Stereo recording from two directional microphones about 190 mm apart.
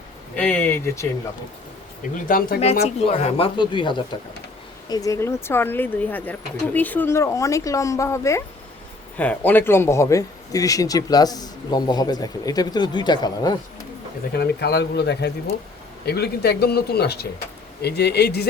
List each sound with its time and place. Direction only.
0.3 s speech: 5° left (ahead or behind)
2.1 s speech: 45° left (ahead or behind)
2.6 s a man's voice: 35° left (ahead or behind)
14.3 s speech: 60° left (ahead or behind)